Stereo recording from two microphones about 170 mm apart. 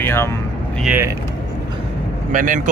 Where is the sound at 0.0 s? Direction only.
15° left (ahead or behind).